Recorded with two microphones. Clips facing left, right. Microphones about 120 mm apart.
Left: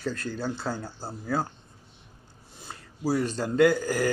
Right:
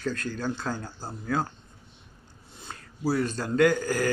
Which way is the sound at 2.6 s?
15° left (ahead or behind).